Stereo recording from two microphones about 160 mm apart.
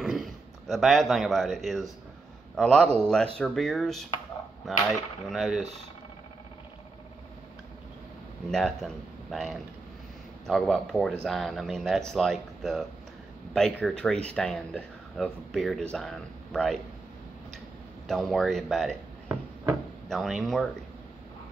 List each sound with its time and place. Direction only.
0.0 s speech: centre (ahead or behind)
8.5 s speech: 5° left (ahead or behind)
18.0 s speech: centre (ahead or behind)